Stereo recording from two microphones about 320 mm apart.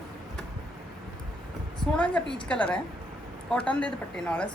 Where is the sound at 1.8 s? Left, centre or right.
Centre.